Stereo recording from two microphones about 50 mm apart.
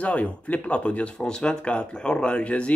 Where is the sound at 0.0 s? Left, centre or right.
Left.